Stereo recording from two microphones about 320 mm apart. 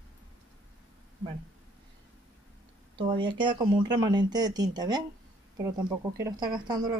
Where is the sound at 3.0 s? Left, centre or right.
Centre.